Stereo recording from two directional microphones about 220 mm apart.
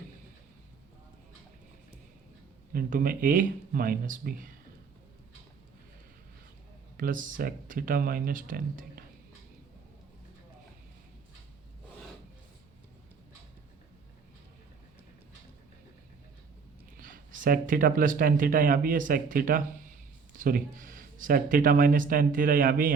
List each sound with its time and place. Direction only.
2.7 s speech: 40° right (ahead or behind)
6.9 s speech: 40° right (ahead or behind)
17.0 s speech: 40° right (ahead or behind)